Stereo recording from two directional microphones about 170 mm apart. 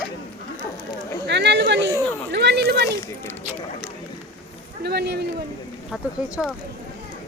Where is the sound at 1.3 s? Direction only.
90° right.